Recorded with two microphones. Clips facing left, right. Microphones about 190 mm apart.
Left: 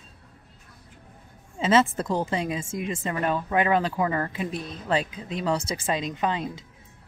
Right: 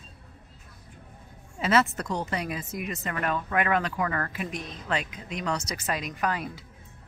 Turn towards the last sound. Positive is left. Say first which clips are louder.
# left 2 dB
turn(degrees=25)  # may be behind; listen again after turning